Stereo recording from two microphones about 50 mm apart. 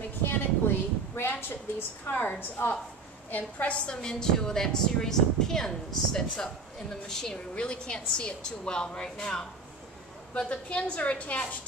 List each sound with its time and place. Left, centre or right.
0.2 s a sound: left
2.0 s a woman's voice: left
3.7 s a woman's voice: centre